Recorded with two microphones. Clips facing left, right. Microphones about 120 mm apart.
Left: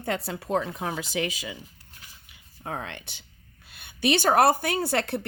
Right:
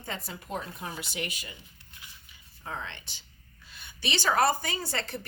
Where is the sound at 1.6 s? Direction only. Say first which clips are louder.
Left 2 dB; 40° left (ahead or behind).